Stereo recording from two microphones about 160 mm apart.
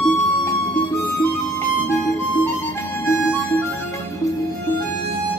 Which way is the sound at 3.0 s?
15° left (ahead or behind).